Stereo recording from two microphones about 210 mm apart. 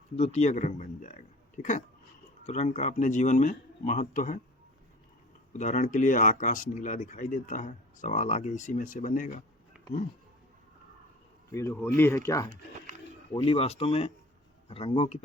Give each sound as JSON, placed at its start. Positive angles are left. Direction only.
{"t": 0.2, "sound": "speech", "side_deg": 30}
{"t": 2.5, "sound": "speech", "side_deg": 35}
{"t": 5.5, "sound": "speech", "side_deg": 35}
{"t": 11.5, "sound": "speech", "side_deg": 10}
{"t": 13.3, "sound": "speech", "side_deg": 25}